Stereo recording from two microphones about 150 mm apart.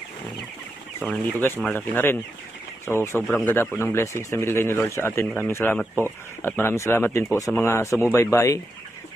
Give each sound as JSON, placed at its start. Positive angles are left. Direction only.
{"t": 0.9, "sound": "speech", "side_deg": 10}